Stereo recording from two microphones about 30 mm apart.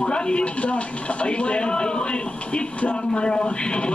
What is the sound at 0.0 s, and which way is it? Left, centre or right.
A man's voice, left.